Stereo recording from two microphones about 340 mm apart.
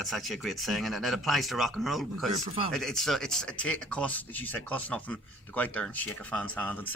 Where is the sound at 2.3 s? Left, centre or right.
Centre.